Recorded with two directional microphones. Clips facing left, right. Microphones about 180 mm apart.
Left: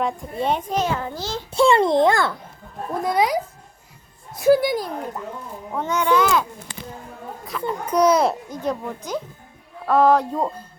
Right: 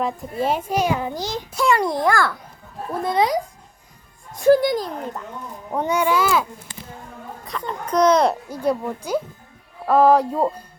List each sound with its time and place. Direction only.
0.0 s a child's voice: 5° right (ahead or behind)
1.5 s a child's voice: 25° left (ahead or behind)
3.0 s a child's voice: 10° left (ahead or behind)
4.4 s a child's voice: 10° left (ahead or behind)
5.7 s a child's voice: 15° right (ahead or behind)
6.7 s a sound: 75° left (ahead or behind)
7.7 s a child's voice: 10° left (ahead or behind)
8.4 s a child's voice: 10° right (ahead or behind)